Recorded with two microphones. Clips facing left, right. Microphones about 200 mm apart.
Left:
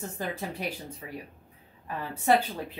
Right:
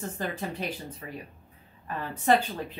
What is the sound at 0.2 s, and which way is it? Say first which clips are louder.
Speech: even; 10° left (ahead or behind).